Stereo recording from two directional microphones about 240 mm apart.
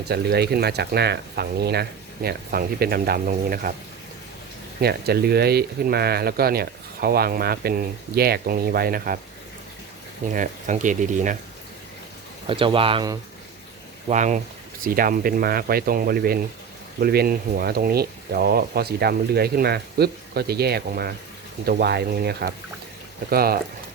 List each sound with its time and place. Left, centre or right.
0.1 s speech: right
4.8 s speech: right
10.3 s speech: right
12.5 s speech: right
14.1 s speech: right